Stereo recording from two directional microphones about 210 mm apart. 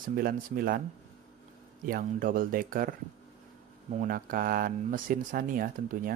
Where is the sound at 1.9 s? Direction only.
40° right (ahead or behind).